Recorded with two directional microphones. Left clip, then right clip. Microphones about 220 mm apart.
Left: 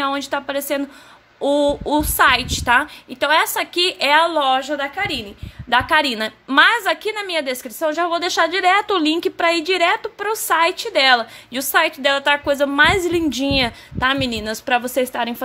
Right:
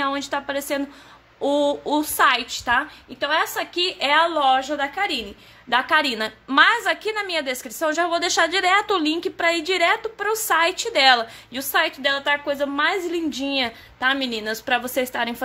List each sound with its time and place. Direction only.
0.0 s a woman's voice: 15° left (ahead or behind)